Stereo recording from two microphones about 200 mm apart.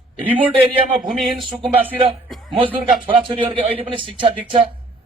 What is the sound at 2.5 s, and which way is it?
Speech, 25° right (ahead or behind).